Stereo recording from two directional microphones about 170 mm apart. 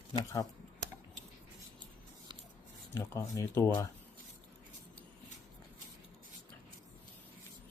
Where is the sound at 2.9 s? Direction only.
15° left (ahead or behind).